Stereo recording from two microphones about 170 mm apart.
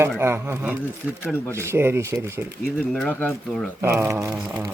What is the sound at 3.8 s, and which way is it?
Speech, 15° right (ahead or behind).